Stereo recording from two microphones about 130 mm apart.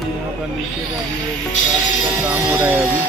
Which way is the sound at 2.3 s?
15° right (ahead or behind).